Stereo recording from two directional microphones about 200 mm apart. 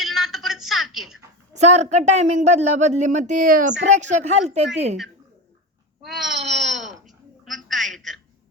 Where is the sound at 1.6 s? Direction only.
35° right (ahead or behind).